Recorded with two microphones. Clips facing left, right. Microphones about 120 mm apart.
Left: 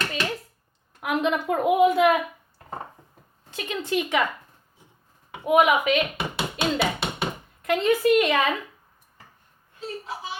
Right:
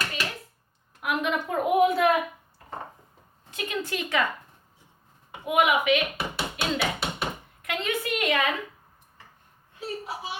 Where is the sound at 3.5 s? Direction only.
25° left (ahead or behind).